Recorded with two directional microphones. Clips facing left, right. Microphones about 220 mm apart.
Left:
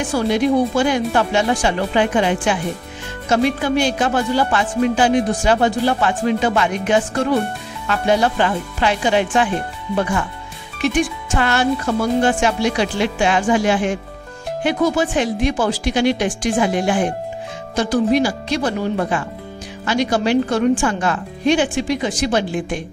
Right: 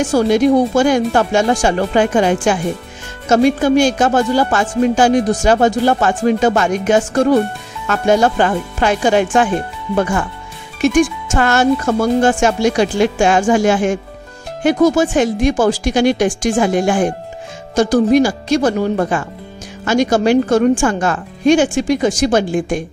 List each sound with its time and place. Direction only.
0.0 s speech: 45° right (ahead or behind)
10.8 s speech: 45° right (ahead or behind)